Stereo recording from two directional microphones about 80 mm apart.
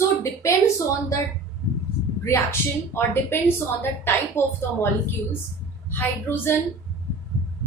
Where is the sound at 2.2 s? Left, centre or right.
Left.